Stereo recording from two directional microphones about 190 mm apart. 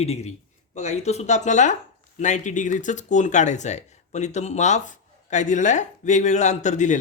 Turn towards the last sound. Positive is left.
turn(degrees=40)  # may be behind; listen again after turning